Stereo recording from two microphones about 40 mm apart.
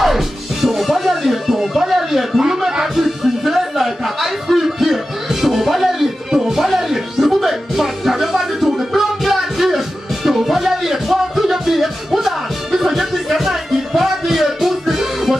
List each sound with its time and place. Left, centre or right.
0.0 s music: centre